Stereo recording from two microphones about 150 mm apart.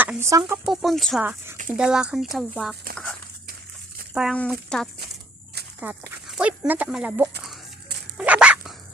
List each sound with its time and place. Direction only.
0.0 s speech: 15° right (ahead or behind)
0.6 s speech: centre (ahead or behind)
1.2 s speech: 10° right (ahead or behind)
4.1 s speech: 5° right (ahead or behind)
5.8 s dog: 5° right (ahead or behind)
6.6 s speech: 10° right (ahead or behind)
8.2 s dog: 10° right (ahead or behind)